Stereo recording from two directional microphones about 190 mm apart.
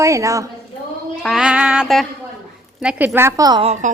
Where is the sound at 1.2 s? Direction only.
5° right (ahead or behind).